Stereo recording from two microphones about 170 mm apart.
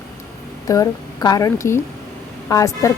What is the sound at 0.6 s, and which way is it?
A woman's voice, 20° left (ahead or behind).